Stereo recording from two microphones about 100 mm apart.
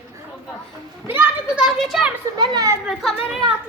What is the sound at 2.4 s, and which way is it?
Speech, 40° right (ahead or behind).